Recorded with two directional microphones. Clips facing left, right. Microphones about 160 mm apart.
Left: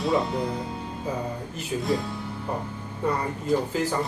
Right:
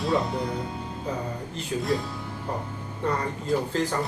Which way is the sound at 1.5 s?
Centre (ahead or behind).